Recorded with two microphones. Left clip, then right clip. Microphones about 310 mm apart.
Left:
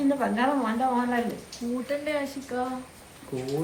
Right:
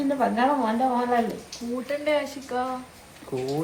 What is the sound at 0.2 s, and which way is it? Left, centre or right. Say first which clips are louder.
Speech: right 3 dB; right.